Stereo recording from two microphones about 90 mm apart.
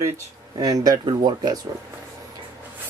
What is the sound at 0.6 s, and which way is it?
Speech, 45° right (ahead or behind).